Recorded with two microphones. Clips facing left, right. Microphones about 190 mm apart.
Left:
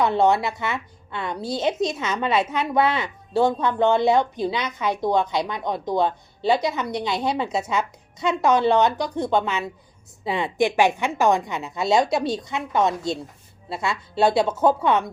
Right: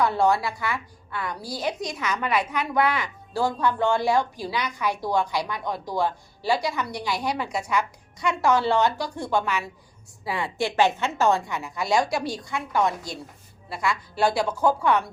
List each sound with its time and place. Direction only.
0.0 s a woman's voice: 20° left (ahead or behind)